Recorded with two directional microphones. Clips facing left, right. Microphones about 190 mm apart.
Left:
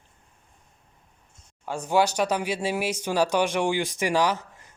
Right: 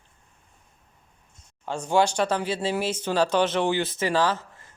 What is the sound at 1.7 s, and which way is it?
Speech, 10° left (ahead or behind).